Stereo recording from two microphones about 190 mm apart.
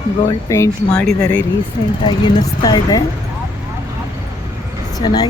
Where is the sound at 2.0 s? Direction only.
25° left (ahead or behind).